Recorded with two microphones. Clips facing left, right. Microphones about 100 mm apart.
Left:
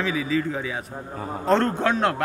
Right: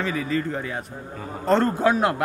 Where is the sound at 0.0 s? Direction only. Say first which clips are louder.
Left 1 dB; centre (ahead or behind).